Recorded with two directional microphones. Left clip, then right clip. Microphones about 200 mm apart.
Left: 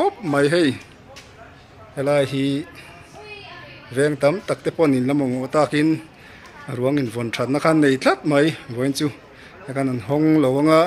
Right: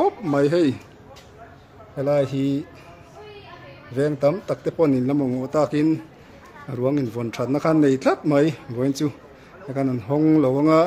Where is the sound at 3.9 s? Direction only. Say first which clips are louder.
Left 2 dB; centre (ahead or behind).